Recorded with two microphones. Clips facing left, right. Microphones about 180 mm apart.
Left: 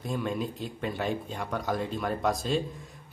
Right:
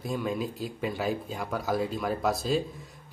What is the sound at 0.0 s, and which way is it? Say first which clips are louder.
A man's voice: right 1 dB; centre (ahead or behind).